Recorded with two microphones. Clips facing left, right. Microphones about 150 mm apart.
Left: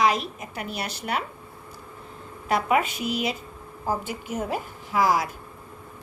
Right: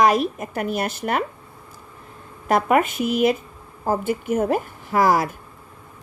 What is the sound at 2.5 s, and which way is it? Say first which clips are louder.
Speech: right 5 dB; 50° right (ahead or behind).